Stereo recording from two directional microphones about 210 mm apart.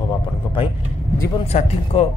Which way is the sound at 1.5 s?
35° left (ahead or behind).